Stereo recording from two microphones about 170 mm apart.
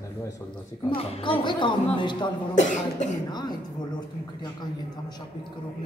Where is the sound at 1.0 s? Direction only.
35° left (ahead or behind).